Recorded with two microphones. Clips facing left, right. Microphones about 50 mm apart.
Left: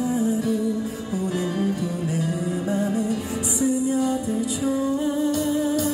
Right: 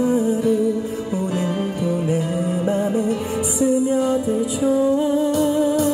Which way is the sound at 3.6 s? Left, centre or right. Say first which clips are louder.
Right 4 dB; centre.